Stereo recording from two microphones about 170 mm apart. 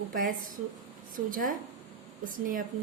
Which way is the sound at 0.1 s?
55° right (ahead or behind).